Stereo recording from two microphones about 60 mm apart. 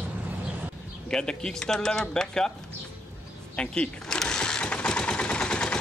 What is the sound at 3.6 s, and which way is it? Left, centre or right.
Sewing machine, centre.